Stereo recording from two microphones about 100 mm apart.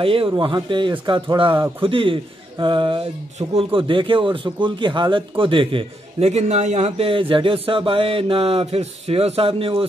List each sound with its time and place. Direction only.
0.0 s a man's voice: 65° right (ahead or behind)